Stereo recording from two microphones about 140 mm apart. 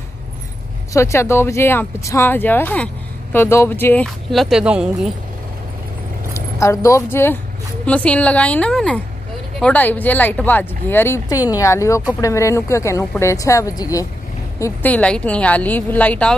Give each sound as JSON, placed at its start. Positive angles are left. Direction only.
{"t": 0.9, "sound": "speech", "side_deg": 20}
{"t": 4.0, "sound": "speech", "side_deg": 0}
{"t": 6.3, "sound": "speech", "side_deg": 20}
{"t": 14.6, "sound": "speech", "side_deg": 10}